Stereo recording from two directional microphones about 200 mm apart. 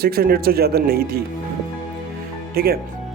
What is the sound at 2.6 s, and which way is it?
Speech, 50° right (ahead or behind).